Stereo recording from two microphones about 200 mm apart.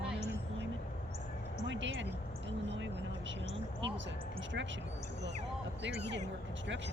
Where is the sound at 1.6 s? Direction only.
65° right (ahead or behind).